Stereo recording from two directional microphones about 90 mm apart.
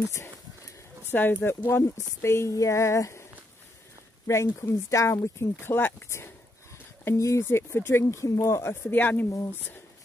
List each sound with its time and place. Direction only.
1.1 s speech: 20° left (ahead or behind)
4.3 s speech: 35° left (ahead or behind)
8.8 s speech: 20° left (ahead or behind)